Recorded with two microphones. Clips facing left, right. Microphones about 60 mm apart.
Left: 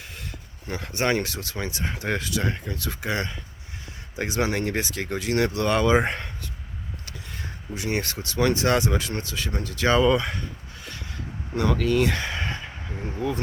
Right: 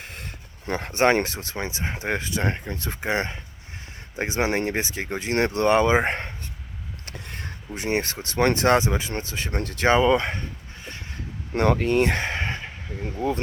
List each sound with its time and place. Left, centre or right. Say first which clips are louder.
0.0 s speech: right 1 dB; right
7.0 s a sound: right 4 dB; right
7.7 s speech: right 2 dB; right
8.8 s speech: even; right
9.5 s speech: right 2 dB; right
9.8 s speech: right 1 dB; right
11.5 s speech: right 2 dB; right